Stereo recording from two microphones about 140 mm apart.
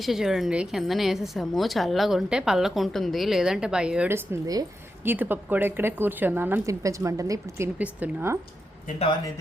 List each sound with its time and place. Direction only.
0.0 s a woman's voice: centre (ahead or behind)
4.1 s speech: 25° right (ahead or behind)
5.0 s speech: 15° right (ahead or behind)
7.8 s speech: 10° right (ahead or behind)